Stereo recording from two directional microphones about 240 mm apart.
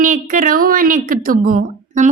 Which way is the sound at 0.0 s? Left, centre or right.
Right.